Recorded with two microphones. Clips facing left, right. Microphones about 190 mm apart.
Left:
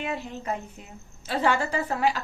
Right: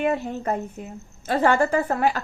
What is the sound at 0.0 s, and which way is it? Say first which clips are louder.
A woman's voice: right 8 dB; 50° right (ahead or behind).